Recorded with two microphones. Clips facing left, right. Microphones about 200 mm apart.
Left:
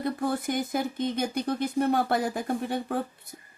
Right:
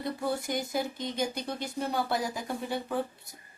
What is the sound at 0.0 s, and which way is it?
Speech, 55° left (ahead or behind).